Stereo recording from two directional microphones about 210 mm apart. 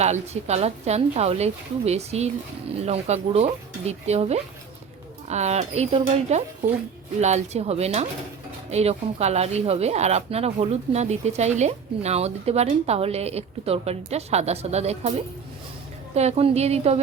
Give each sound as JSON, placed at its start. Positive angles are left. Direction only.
{"t": 0.0, "sound": "speech", "side_deg": -30}
{"t": 16.1, "sound": "speech", "side_deg": -30}